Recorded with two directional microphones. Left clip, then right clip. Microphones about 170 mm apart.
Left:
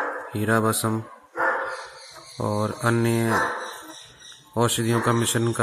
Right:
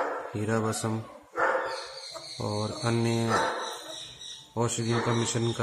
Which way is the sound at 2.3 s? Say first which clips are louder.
Left 7 dB; 30° left (ahead or behind).